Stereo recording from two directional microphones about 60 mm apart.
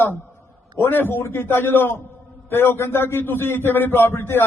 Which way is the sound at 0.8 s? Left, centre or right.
Left.